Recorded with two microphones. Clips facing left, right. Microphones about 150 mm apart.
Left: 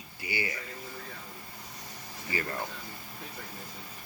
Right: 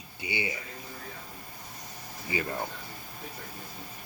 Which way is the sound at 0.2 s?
20° right (ahead or behind).